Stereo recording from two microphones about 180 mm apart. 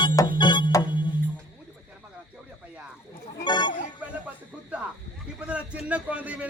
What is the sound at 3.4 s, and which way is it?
Music, 25° left (ahead or behind).